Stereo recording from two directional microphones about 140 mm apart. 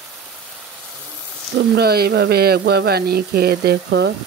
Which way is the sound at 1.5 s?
90° right.